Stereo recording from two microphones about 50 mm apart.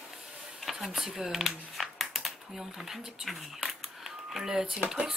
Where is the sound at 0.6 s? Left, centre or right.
Centre.